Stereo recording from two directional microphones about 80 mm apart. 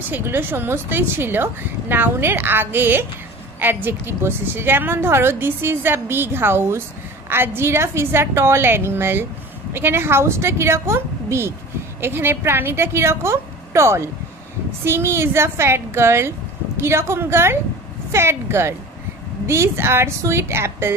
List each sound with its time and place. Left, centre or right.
0.0 s a woman's voice: right